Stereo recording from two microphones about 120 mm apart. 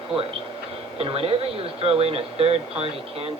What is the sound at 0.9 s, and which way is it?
Speech, 55° right (ahead or behind).